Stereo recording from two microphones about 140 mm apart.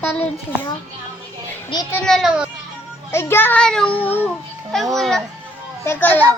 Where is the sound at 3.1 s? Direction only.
15° left (ahead or behind).